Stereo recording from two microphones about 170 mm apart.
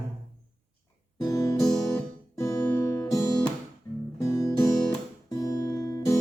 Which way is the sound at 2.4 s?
20° left (ahead or behind).